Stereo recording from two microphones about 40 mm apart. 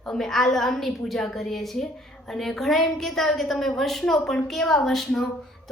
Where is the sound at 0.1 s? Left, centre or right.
Centre.